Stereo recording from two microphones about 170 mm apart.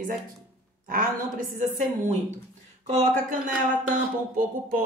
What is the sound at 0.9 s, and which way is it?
Speech, 55° right (ahead or behind).